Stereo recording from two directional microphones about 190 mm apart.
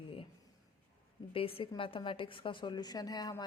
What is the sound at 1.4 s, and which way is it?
Speech, 30° left (ahead or behind).